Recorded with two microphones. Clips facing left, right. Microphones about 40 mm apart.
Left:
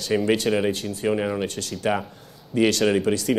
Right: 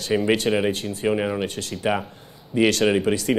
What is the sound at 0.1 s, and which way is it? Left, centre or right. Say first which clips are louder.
Speech: right 1 dB; centre.